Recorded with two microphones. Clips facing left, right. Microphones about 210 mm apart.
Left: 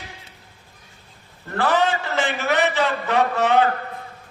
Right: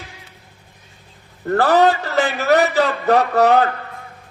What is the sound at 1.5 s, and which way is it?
A man's voice, 40° right (ahead or behind).